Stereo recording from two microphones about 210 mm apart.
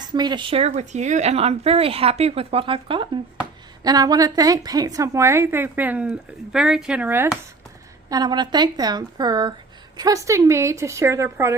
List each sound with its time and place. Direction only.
0.0 s a woman's voice: 20° right (ahead or behind)
8.1 s a woman's voice: 20° right (ahead or behind)